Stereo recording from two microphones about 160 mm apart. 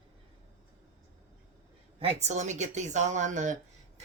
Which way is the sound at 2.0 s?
45° right (ahead or behind).